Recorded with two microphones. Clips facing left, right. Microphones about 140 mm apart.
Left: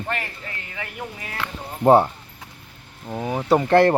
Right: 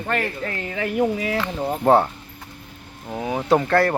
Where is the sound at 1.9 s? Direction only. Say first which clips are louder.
Left 2 dB; 15° left (ahead or behind).